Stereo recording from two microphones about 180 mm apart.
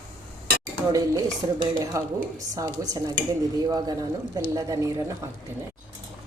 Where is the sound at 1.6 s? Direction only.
20° right (ahead or behind).